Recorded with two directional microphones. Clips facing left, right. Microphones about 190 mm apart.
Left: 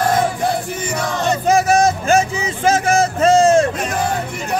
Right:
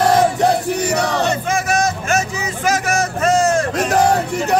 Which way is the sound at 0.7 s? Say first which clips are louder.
Right 4 dB; 70° right (ahead or behind).